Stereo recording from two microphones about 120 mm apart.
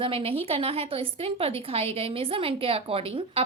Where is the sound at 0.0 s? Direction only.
50° right (ahead or behind).